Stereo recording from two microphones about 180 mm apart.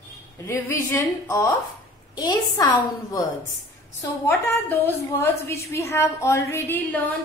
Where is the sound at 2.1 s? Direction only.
20° left (ahead or behind).